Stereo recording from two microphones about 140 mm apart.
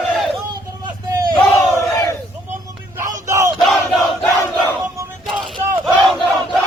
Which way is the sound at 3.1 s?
20° right (ahead or behind).